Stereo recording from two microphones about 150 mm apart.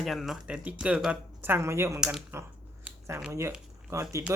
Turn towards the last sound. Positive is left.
turn(degrees=-15)  # may be behind; listen again after turning